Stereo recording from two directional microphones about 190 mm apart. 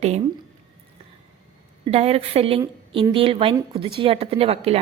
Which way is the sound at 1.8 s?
30° right (ahead or behind).